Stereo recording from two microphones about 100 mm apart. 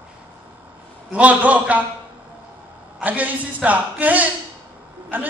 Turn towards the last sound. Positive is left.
turn(degrees=-15)  # may be behind; listen again after turning